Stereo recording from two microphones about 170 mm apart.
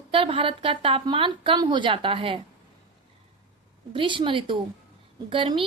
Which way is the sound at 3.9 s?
30° right (ahead or behind).